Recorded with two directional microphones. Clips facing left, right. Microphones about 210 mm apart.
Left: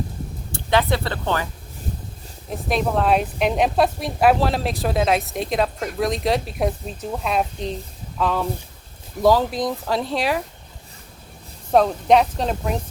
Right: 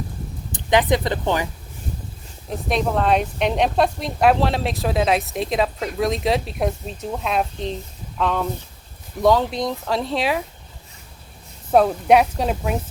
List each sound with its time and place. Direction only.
0.5 s speech: 15° right (ahead or behind)
2.6 s speech: centre (ahead or behind)
11.7 s speech: 5° right (ahead or behind)